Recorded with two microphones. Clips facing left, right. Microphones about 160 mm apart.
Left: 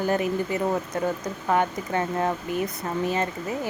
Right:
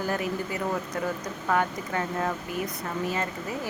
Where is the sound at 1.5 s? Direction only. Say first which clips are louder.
Left 3 dB; 25° left (ahead or behind).